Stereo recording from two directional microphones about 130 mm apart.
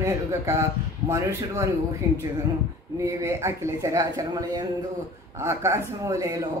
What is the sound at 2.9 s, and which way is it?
Speech, 20° right (ahead or behind).